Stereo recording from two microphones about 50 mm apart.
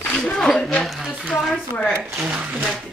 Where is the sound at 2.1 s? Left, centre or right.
Right.